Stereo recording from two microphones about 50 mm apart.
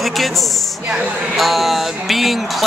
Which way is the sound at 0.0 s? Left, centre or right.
Centre.